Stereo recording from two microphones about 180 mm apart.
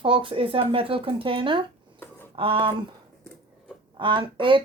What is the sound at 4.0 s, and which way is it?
Speech, 25° right (ahead or behind).